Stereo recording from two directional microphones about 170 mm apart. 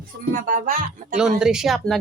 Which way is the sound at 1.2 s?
5° right (ahead or behind).